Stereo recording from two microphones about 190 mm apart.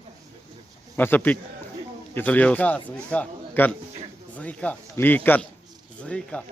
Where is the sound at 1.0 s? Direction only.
10° left (ahead or behind).